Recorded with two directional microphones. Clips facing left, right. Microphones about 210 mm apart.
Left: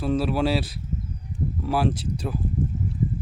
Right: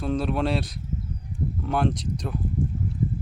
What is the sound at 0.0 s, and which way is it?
Speech, 5° left (ahead or behind).